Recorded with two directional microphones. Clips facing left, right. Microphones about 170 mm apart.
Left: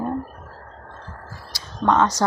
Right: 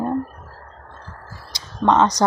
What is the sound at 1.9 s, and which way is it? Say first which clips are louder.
Speech: right 2 dB; 20° right (ahead or behind).